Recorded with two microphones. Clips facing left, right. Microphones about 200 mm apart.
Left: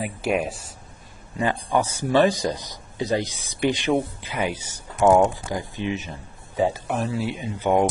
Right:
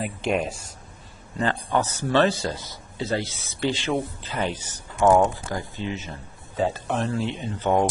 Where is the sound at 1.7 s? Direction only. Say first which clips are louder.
Left 2 dB; 10° left (ahead or behind).